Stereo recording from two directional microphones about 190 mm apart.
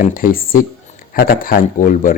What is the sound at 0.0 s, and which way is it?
Speech, 45° left (ahead or behind).